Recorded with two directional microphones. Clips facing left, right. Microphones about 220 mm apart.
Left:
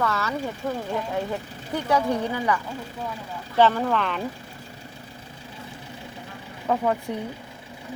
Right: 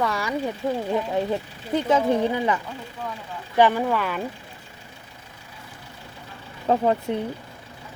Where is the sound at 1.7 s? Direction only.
20° right (ahead or behind).